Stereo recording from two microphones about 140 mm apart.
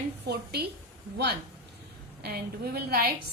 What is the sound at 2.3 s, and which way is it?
Speech, 90° right.